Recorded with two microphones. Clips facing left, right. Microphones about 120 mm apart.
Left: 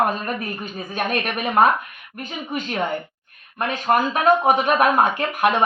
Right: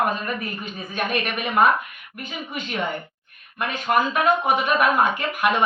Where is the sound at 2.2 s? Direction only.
45° left (ahead or behind).